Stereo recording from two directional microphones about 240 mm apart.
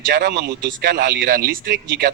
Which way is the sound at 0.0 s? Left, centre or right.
Right.